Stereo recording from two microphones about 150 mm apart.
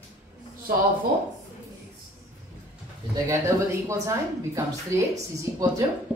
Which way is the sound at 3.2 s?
20° right (ahead or behind).